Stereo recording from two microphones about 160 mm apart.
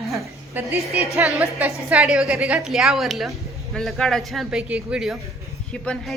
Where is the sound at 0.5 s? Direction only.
10° right (ahead or behind).